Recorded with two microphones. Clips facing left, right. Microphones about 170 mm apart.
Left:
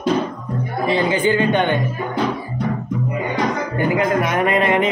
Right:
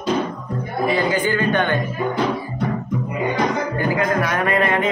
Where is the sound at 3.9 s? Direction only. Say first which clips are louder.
Left 3 dB; 20° left (ahead or behind).